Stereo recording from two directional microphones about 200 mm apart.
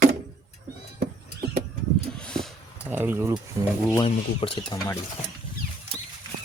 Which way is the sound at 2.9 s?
10° right (ahead or behind).